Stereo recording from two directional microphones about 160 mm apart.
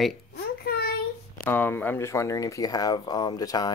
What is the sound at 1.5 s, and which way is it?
Speech, 10° left (ahead or behind).